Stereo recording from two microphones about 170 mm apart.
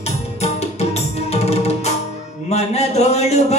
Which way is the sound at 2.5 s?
40° left (ahead or behind).